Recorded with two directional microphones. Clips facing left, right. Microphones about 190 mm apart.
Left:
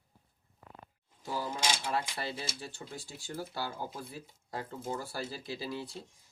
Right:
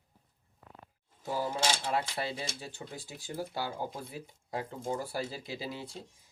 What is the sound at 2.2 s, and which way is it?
Speech, 20° right (ahead or behind).